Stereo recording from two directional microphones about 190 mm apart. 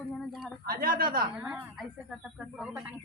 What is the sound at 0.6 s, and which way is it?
Speech, 50° right (ahead or behind).